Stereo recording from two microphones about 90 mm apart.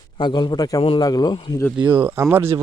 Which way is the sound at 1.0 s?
50° left (ahead or behind).